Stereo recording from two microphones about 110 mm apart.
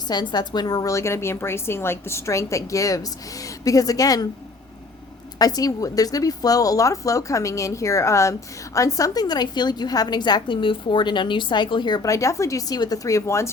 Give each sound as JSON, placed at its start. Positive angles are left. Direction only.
{"t": 0.1, "sound": "a woman's voice", "side_deg": 40}
{"t": 5.4, "sound": "a woman's voice", "side_deg": 35}
{"t": 12.0, "sound": "a woman's voice", "side_deg": 30}